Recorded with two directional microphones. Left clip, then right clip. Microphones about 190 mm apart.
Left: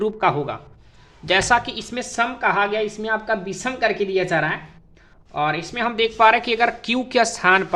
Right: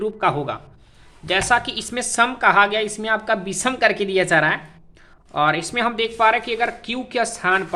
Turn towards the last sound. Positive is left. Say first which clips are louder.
# left 3 dB
turn(degrees=15)  # may be behind; listen again after turning